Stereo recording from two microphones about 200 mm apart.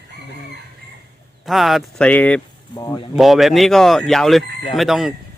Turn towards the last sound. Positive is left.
turn(degrees=0)  # may be behind; listen again after turning